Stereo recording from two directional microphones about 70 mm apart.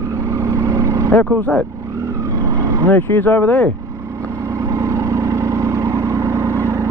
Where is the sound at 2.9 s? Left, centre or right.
Left.